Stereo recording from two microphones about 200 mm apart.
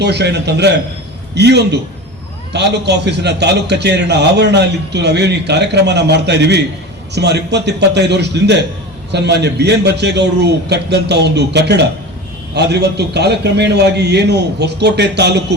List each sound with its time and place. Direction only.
0.0 s a man's voice: 55° right (ahead or behind)